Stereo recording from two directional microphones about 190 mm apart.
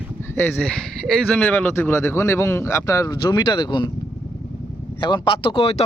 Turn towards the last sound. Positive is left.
turn(degrees=30)  # may be behind; listen again after turning